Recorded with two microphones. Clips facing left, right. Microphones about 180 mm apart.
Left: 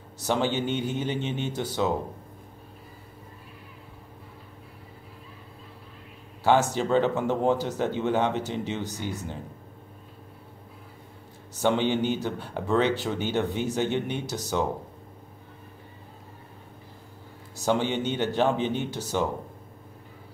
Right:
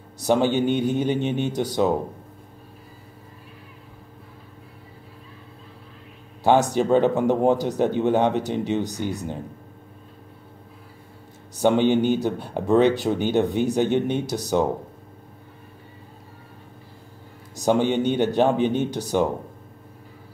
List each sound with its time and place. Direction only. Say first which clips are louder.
0.2 s speech: right 6 dB; 15° right (ahead or behind)
6.4 s speech: right 4 dB; 15° right (ahead or behind)
11.5 s a man's voice: right 6 dB; 15° right (ahead or behind)
17.6 s a man's voice: right 5 dB; 15° right (ahead or behind)